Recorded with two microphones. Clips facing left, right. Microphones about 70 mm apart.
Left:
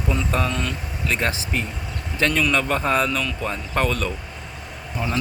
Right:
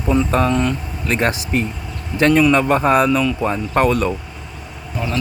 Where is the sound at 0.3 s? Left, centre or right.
Right.